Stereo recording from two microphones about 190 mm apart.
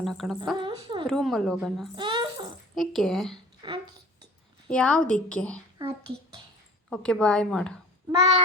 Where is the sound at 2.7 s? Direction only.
Centre (ahead or behind).